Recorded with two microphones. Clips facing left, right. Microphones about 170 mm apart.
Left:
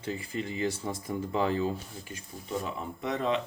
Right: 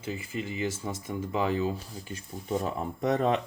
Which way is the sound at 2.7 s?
45° right (ahead or behind).